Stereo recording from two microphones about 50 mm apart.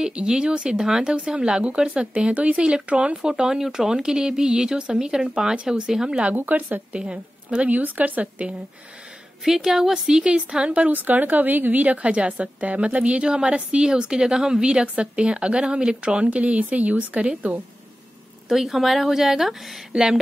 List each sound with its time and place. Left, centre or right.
0.0 s a woman's voice: centre
3.2 s speech: centre
6.3 s speech: right
6.9 s a woman's voice: centre
7.7 s speech: right
9.4 s a woman's voice: centre; by 17.4 s right
18.5 s a woman's voice: centre